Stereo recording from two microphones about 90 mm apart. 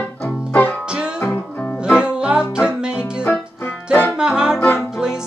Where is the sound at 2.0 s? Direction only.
10° right (ahead or behind).